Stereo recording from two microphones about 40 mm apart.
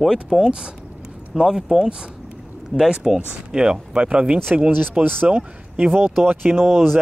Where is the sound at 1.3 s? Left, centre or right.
Centre.